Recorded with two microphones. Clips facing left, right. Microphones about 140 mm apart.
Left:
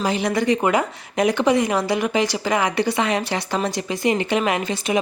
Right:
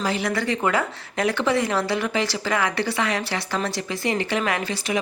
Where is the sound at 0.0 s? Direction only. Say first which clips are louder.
Left 4 dB; 20° left (ahead or behind).